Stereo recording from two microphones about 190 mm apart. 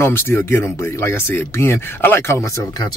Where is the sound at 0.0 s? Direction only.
10° left (ahead or behind).